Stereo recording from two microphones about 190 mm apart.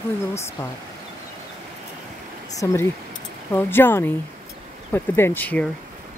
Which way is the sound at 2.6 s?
15° left (ahead or behind).